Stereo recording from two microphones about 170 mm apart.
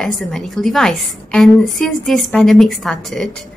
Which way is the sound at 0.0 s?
Centre (ahead or behind).